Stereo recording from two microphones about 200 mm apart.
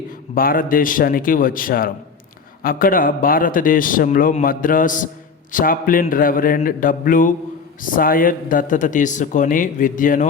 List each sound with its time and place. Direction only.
0.3 s a man's voice: 45° left (ahead or behind)